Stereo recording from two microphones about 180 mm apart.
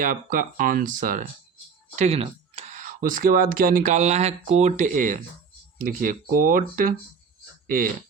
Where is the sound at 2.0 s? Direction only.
35° right (ahead or behind); by 6.9 s 50° right (ahead or behind).